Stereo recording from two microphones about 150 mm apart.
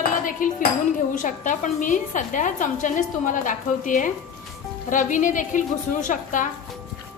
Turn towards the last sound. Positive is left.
turn(degrees=60)  # may be behind; listen again after turning